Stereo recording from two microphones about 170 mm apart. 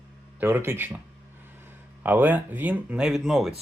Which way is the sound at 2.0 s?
10° right (ahead or behind).